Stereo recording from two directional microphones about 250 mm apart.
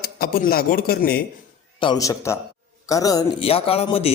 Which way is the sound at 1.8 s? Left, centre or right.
Centre.